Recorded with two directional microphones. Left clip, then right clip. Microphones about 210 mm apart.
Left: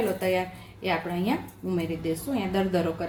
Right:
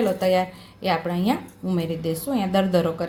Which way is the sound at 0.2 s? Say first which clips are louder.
Right 6 dB; 35° right (ahead or behind).